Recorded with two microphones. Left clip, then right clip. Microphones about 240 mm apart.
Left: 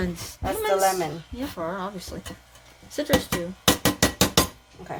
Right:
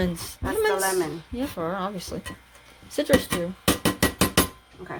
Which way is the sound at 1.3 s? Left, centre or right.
Centre.